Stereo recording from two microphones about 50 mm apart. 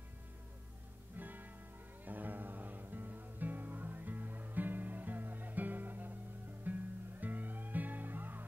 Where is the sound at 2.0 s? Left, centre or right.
Right.